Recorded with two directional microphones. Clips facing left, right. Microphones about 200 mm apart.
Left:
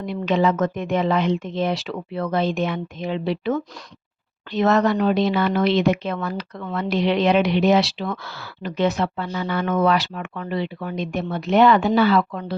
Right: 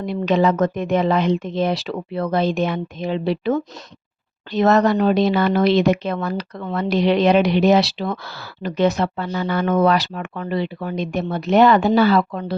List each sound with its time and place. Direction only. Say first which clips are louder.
0.0 s speech: right 2 dB; 40° right (ahead or behind)